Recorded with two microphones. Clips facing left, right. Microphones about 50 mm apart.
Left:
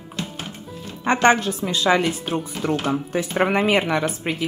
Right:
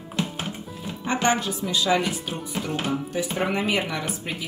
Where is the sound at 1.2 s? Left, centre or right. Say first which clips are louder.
Left 6 dB; left.